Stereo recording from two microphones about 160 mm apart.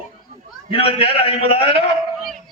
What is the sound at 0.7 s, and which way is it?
Speech, 35° left (ahead or behind).